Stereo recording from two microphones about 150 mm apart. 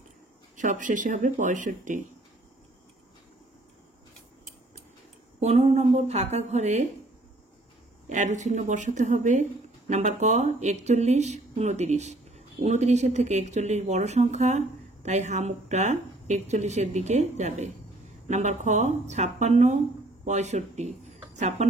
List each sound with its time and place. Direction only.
0.6 s speech: 55° right (ahead or behind)
5.4 s speech: 45° right (ahead or behind)
8.1 s speech: 50° right (ahead or behind)